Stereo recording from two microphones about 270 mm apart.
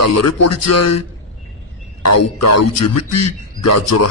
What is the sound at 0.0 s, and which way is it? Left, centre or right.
Speech, left.